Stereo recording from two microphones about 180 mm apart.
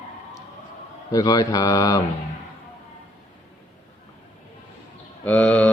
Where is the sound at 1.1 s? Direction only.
20° left (ahead or behind).